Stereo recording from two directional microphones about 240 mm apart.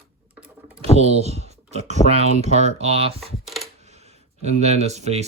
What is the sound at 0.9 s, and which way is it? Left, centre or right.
Speech, right.